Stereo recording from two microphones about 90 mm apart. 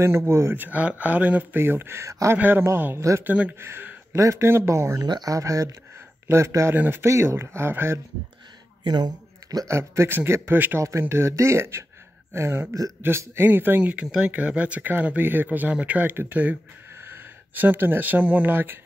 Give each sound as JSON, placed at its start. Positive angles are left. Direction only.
{"t": 0.0, "sound": "speech", "side_deg": -30}
{"t": 2.3, "sound": "speech", "side_deg": -20}
{"t": 3.3, "sound": "speech", "side_deg": -15}
{"t": 3.5, "sound": "speech", "side_deg": -25}
{"t": 5.0, "sound": "speech", "side_deg": -45}
{"t": 8.8, "sound": "a sound", "side_deg": -50}
{"t": 9.7, "sound": "speech", "side_deg": -30}